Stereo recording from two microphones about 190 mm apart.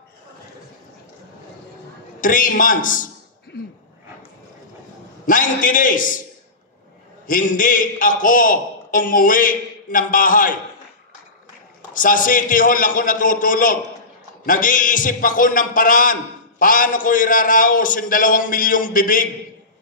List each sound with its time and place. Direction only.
2.1 s a man's voice: 45° left (ahead or behind)
5.2 s a man's voice: 45° left (ahead or behind)
7.2 s a man's voice: 45° left (ahead or behind)
11.9 s a man's voice: 45° left (ahead or behind)